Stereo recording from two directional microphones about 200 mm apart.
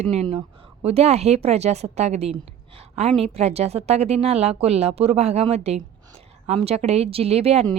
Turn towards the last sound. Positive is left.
turn(degrees=-30)  # may be behind; listen again after turning